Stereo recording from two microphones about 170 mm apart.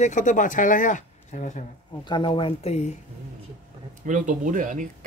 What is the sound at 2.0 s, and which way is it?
Speech, 30° left (ahead or behind).